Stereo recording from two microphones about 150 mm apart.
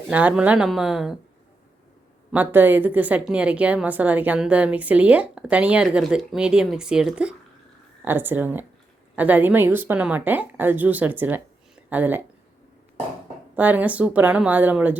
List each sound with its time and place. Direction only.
0.1 s a woman's voice: 10° right (ahead or behind)
2.3 s a woman's voice: 10° right (ahead or behind)
13.6 s a woman's voice: 10° right (ahead or behind)